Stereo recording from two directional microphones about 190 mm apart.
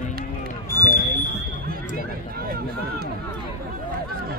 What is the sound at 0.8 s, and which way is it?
Smoke detector, 45° left (ahead or behind).